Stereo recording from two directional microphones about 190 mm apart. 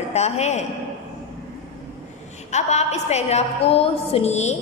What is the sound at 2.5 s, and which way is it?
A woman's voice, 35° left (ahead or behind).